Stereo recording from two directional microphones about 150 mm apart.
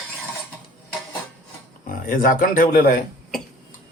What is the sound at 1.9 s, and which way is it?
Speech, 65° left (ahead or behind).